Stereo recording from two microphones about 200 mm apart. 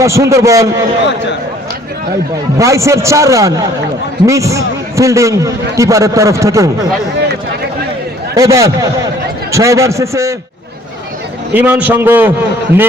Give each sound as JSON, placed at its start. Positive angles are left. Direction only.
{"t": 0.0, "sound": "a man's voice", "side_deg": -15}
{"t": 2.6, "sound": "a man's voice", "side_deg": -15}
{"t": 8.4, "sound": "a man's voice", "side_deg": -15}
{"t": 11.5, "sound": "a man's voice", "side_deg": -5}